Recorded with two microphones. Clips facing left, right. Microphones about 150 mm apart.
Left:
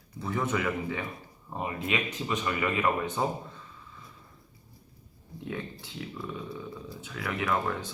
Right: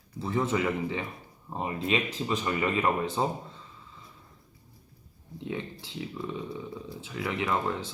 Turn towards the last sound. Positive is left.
turn(degrees=-20)  # may be behind; listen again after turning